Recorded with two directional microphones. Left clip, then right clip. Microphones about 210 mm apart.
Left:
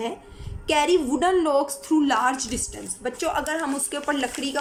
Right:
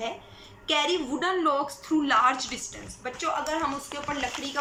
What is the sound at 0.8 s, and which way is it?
A woman's voice, 30° left (ahead or behind).